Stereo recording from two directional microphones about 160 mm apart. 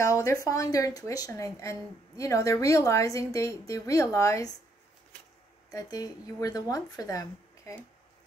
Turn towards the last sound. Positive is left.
turn(degrees=20)  # may be behind; listen again after turning